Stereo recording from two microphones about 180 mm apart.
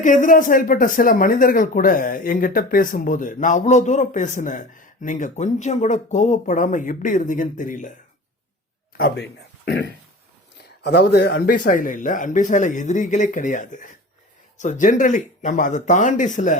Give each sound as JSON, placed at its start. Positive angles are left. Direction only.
{"t": 0.0, "sound": "speech", "side_deg": 45}
{"t": 9.0, "sound": "speech", "side_deg": 65}